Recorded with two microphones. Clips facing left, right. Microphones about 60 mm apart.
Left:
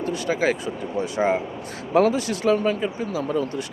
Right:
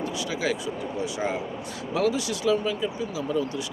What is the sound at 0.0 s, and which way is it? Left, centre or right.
Speech, left.